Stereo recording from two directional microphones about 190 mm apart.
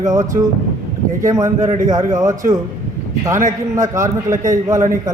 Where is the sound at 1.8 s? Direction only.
15° right (ahead or behind).